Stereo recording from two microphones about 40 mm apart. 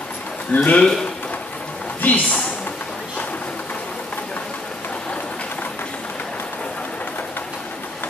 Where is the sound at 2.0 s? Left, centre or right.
Left.